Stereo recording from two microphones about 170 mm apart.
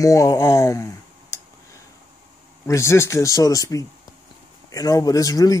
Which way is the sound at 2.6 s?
15° left (ahead or behind).